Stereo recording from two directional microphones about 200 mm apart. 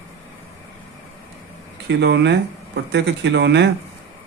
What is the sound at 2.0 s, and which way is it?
A man's voice, 60° right (ahead or behind).